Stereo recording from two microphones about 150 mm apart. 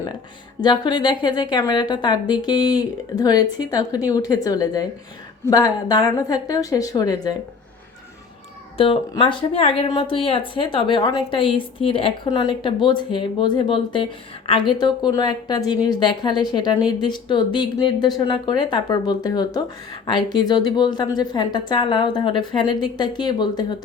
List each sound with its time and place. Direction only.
0.6 s a woman's voice: 30° left (ahead or behind)
8.8 s a woman's voice: 35° left (ahead or behind)